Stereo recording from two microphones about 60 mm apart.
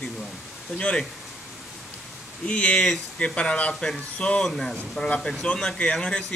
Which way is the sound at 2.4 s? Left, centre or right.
Centre.